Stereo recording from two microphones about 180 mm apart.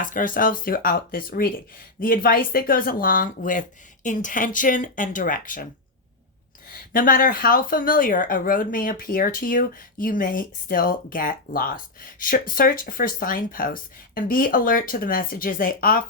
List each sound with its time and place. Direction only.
0.0 s speech: 50° left (ahead or behind)
6.9 s speech: 50° left (ahead or behind)